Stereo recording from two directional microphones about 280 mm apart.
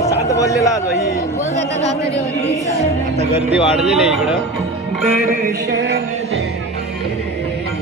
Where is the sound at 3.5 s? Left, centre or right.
Centre.